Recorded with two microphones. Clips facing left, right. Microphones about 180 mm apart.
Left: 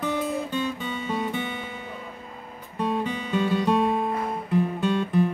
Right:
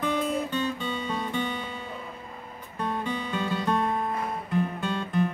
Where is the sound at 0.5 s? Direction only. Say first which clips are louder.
Left 1 dB; 10° left (ahead or behind).